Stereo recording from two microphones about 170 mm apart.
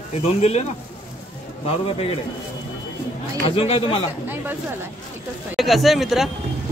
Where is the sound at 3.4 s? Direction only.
35° left (ahead or behind).